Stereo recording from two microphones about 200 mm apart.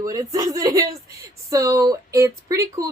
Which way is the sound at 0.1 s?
20° right (ahead or behind).